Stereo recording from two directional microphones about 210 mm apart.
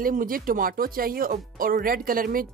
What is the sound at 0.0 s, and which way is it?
Speech, 40° right (ahead or behind).